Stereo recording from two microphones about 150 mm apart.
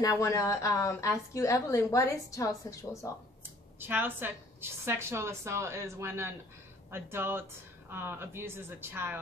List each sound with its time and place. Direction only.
0.0 s a woman's voice: 20° left (ahead or behind)
3.8 s a woman's voice: 15° right (ahead or behind)